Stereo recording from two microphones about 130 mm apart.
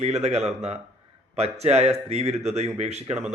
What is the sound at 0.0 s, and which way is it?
A man's voice, 55° right (ahead or behind).